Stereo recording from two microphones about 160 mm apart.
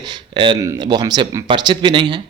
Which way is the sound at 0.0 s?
30° right (ahead or behind).